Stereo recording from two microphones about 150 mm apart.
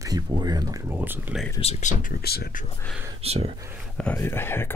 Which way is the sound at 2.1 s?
90° left.